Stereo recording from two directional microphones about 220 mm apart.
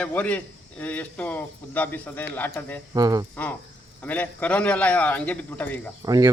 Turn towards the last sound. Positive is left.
turn(degrees=-15)  # may be behind; listen again after turning